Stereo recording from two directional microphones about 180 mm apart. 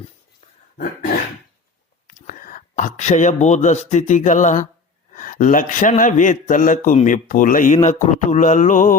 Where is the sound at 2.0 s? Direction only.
45° left (ahead or behind).